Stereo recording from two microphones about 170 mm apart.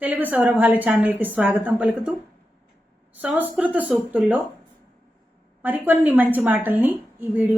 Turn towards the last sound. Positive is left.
turn(degrees=-10)  # may be behind; listen again after turning